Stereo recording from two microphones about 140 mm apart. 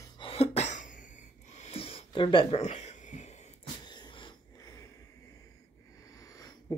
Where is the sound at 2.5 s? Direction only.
55° left (ahead or behind).